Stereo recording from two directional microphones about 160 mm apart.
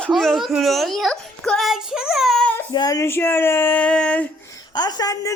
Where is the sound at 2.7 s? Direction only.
25° left (ahead or behind); by 4.3 s 5° left (ahead or behind).